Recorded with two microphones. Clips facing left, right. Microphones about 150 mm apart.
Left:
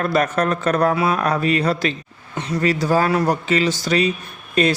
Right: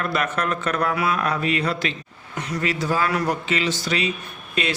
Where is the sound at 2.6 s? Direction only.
40° left (ahead or behind).